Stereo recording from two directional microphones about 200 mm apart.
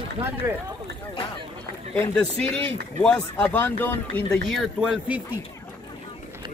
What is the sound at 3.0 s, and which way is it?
Speech, 5° left (ahead or behind).